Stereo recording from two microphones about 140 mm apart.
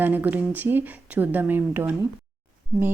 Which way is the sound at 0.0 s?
15° right (ahead or behind).